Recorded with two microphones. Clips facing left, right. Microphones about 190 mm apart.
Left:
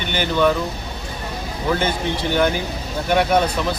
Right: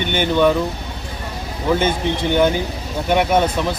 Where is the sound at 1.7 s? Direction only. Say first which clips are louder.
Right 3 dB; 20° right (ahead or behind).